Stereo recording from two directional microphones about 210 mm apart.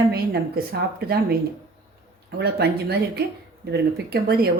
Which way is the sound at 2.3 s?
50° right (ahead or behind).